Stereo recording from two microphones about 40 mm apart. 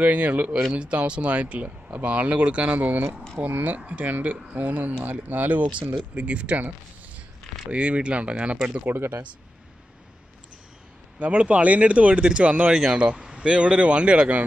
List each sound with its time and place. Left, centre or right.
0.0 s speech: right
7.7 s speech: right
8.8 s speech: right
11.1 s speech: right